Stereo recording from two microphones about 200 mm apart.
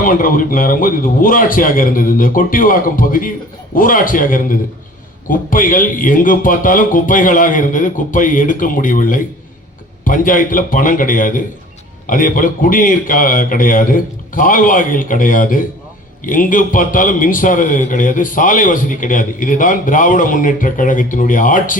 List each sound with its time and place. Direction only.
0.0 s a man's voice: 45° left (ahead or behind)